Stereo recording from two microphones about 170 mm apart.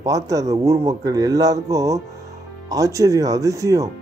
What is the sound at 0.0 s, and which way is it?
Speech, 20° right (ahead or behind).